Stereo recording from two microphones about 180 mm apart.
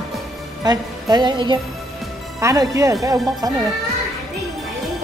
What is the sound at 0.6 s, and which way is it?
Music, 20° right (ahead or behind).